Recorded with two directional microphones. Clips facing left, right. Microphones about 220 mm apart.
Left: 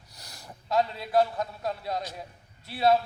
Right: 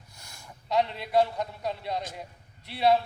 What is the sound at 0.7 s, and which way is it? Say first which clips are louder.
A man's voice: even; centre (ahead or behind).